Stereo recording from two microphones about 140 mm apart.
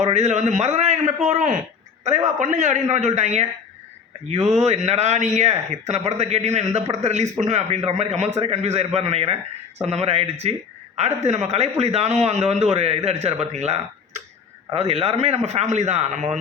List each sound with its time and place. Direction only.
0.0 s a man's voice: 55° right (ahead or behind)
11.5 s speech: 50° right (ahead or behind)